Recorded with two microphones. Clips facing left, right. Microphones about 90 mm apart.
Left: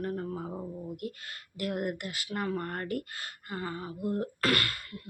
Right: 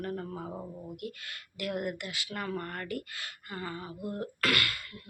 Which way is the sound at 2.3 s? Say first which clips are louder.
Left 4 dB; 25° left (ahead or behind).